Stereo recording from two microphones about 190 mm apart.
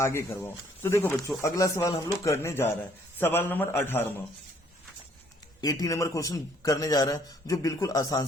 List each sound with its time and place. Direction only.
0.0 s a man's voice: 15° left (ahead or behind)
5.5 s a man's voice: 20° left (ahead or behind)